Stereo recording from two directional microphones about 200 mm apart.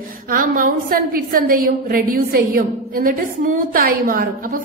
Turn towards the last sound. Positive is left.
turn(degrees=-45)  # may be behind; listen again after turning